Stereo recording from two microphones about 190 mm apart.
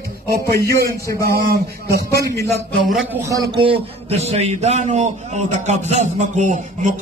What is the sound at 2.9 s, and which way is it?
A man's voice, 15° right (ahead or behind).